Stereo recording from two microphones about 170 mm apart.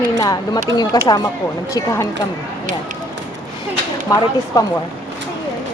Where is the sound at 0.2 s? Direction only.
20° left (ahead or behind).